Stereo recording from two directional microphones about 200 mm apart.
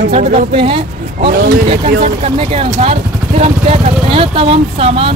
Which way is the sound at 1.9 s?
45° right (ahead or behind).